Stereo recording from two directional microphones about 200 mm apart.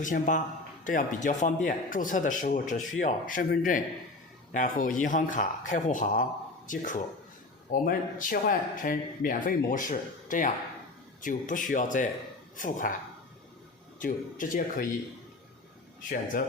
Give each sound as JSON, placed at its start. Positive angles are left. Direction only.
{"t": 0.0, "sound": "a man's voice", "side_deg": 40}
{"t": 14.0, "sound": "speech", "side_deg": 40}